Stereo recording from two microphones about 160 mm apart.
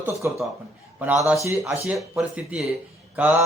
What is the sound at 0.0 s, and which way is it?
A man's voice, 20° right (ahead or behind).